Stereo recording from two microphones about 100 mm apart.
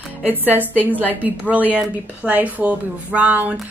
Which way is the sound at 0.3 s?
20° right (ahead or behind).